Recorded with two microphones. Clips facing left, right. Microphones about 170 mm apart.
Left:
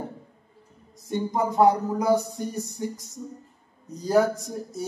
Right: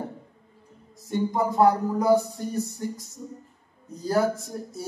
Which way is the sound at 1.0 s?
20° left (ahead or behind).